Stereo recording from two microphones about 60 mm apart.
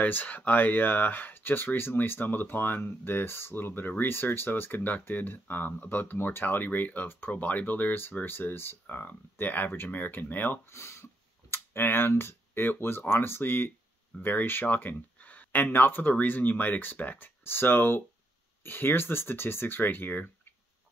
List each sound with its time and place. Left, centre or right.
0.0 s speech: left
10.7 s speech: left